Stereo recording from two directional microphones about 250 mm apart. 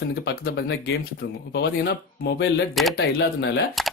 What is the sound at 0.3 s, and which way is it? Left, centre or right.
Speech, left.